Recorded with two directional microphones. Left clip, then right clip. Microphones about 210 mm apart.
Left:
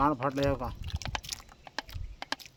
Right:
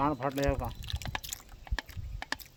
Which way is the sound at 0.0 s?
20° left (ahead or behind).